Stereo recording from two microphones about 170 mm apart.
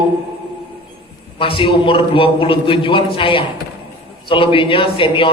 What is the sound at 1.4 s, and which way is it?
A man's voice, 30° left (ahead or behind).